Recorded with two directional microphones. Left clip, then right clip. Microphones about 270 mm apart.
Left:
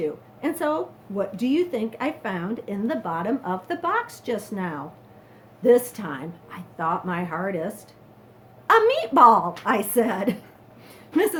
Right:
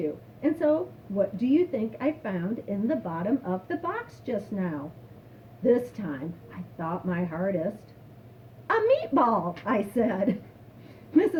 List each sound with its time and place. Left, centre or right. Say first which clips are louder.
0.4 s speech: even; centre
8.6 s speech: left 5 dB; centre